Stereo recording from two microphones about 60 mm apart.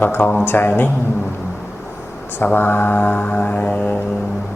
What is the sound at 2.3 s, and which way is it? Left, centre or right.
Mantra, left.